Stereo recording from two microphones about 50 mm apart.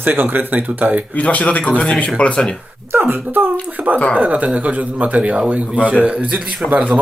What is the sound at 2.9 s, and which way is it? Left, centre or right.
Speech, right.